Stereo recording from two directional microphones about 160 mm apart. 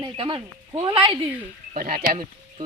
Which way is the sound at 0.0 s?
30° right (ahead or behind).